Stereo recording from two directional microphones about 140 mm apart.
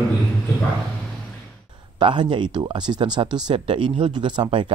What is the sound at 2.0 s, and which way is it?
Speech, 35° right (ahead or behind).